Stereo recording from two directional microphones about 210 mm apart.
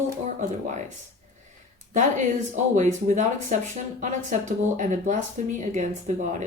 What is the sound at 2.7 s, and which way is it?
Speech, 35° right (ahead or behind).